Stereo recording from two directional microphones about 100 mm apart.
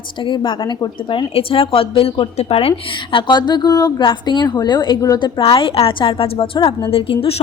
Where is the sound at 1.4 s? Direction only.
65° left (ahead or behind); by 3.9 s 40° left (ahead or behind).